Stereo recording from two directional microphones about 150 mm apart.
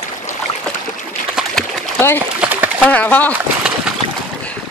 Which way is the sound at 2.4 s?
10° right (ahead or behind).